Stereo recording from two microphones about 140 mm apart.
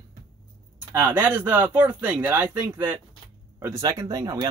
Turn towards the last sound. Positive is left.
turn(degrees=-25)  # may be behind; listen again after turning